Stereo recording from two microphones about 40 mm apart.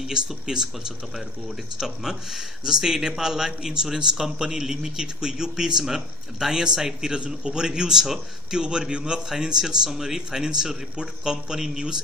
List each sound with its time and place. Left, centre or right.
0.0 s speech: centre